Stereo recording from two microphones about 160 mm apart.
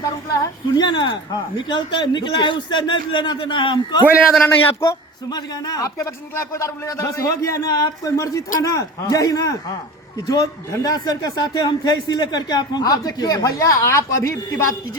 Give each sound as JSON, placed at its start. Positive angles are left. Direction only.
{"t": 0.0, "sound": "a man's voice", "side_deg": 25}
{"t": 4.4, "sound": "a man's voice", "side_deg": 20}